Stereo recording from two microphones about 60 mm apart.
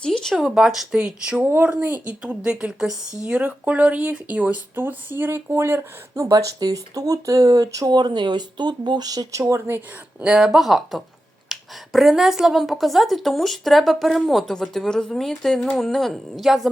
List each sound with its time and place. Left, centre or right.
0.0 s a sound: centre
0.3 s speech: centre
1.5 s speech: right
2.2 s speech: centre
3.2 s speech: right
4.7 s speech: right
6.2 s speech: right
9.6 s speech: right
10.2 s speech: centre